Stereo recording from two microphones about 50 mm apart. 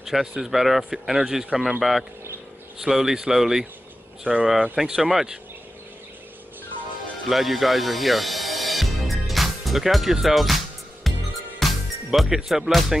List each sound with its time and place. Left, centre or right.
0.0 s speech: centre
1.8 s speech: centre
4.2 s speech: right
4.7 s speech: centre
7.2 s music: centre
10.2 s speech: centre
11.1 s music: centre